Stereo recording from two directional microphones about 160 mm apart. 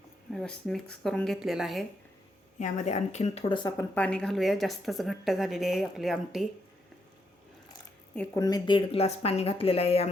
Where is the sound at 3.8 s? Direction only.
10° left (ahead or behind).